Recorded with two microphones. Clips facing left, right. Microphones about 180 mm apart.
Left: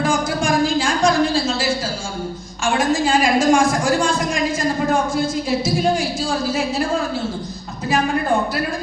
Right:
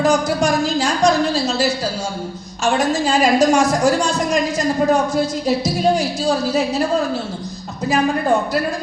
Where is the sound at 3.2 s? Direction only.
40° right (ahead or behind).